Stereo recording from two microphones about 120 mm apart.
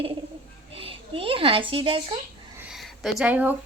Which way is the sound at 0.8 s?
50° right (ahead or behind).